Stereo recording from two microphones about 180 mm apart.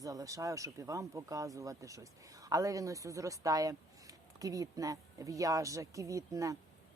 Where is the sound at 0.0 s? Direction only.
20° right (ahead or behind).